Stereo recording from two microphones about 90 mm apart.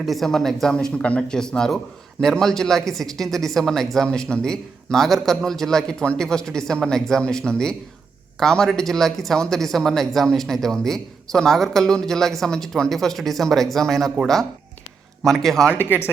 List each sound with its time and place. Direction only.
0.0 s a man's voice: centre (ahead or behind)
15.2 s speech: 5° left (ahead or behind)
15.7 s speech: 20° right (ahead or behind)